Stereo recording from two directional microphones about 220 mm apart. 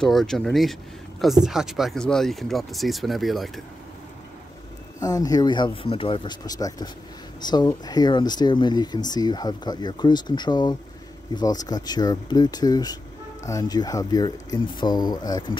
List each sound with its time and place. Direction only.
0.0 s speech: centre (ahead or behind)
5.0 s speech: 15° left (ahead or behind)